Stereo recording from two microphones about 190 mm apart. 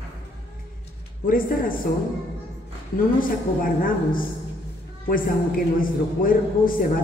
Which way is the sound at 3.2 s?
45° left (ahead or behind).